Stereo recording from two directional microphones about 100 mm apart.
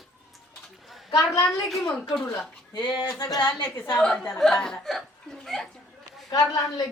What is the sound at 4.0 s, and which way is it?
Speech, 5° left (ahead or behind).